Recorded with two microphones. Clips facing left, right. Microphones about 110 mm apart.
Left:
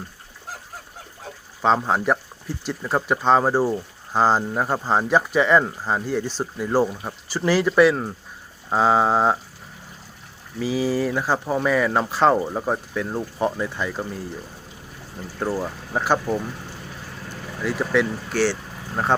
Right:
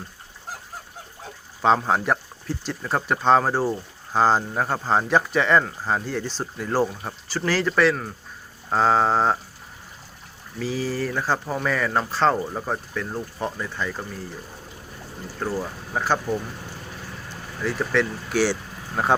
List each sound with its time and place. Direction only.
1.6 s speech: centre (ahead or behind)
4.2 s speech: centre (ahead or behind)
10.6 s speech: 10° left (ahead or behind)
15.4 s speech: 10° left (ahead or behind)
17.6 s speech: 5° left (ahead or behind)
19.0 s speech: 5° right (ahead or behind)